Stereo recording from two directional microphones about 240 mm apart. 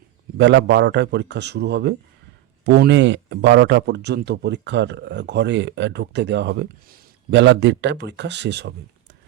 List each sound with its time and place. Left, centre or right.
0.3 s speech: right